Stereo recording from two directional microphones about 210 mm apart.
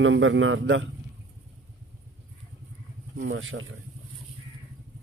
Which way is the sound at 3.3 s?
65° right (ahead or behind).